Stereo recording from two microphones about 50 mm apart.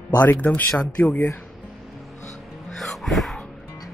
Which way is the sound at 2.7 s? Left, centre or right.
Centre.